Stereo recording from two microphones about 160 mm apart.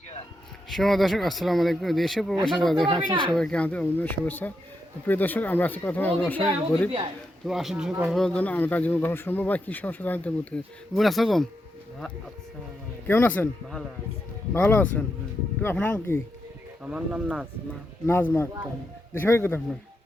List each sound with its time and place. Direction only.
0.7 s speech: centre (ahead or behind)
3.1 s speech: 30° right (ahead or behind)
3.3 s speech: 5° left (ahead or behind)
7.4 s speech: centre (ahead or behind)
13.1 s speech: 10° left (ahead or behind)
14.5 s speech: 10° left (ahead or behind)
16.8 s speech: 5° right (ahead or behind)
18.0 s speech: 15° left (ahead or behind)